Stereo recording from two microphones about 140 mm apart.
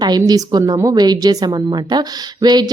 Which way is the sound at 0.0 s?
30° right (ahead or behind).